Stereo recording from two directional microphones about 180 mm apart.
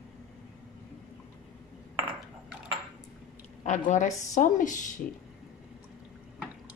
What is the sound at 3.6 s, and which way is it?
A woman's voice, 40° left (ahead or behind).